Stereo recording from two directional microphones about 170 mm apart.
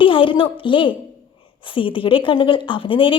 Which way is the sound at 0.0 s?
30° left (ahead or behind).